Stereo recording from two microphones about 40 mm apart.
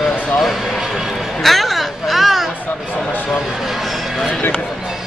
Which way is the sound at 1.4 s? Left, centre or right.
Centre.